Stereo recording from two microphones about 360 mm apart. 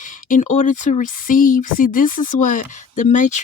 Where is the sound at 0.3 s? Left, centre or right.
Left.